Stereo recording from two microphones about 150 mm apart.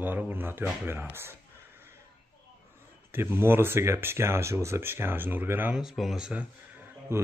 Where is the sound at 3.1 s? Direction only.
15° right (ahead or behind).